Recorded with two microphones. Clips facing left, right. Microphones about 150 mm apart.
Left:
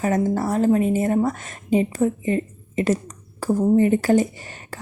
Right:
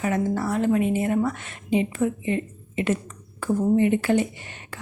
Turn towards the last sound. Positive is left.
turn(degrees=40)  # may be behind; listen again after turning